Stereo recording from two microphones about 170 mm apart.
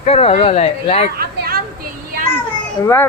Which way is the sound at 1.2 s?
65° right (ahead or behind).